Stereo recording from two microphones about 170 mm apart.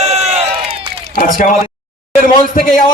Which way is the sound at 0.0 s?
35° right (ahead or behind).